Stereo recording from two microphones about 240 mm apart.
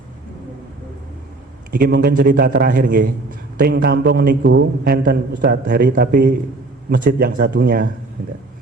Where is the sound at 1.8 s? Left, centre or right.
Right.